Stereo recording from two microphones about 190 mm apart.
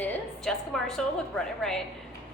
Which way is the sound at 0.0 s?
5° left (ahead or behind).